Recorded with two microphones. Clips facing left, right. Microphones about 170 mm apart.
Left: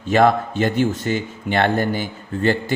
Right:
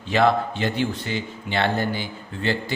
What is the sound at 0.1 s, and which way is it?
Speech, 50° left (ahead or behind).